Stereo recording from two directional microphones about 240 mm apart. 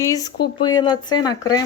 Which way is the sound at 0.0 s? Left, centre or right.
Centre.